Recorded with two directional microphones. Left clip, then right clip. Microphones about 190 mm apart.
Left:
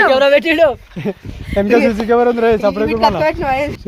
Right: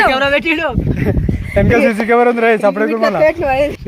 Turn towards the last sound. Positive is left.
turn(degrees=15)  # may be behind; listen again after turning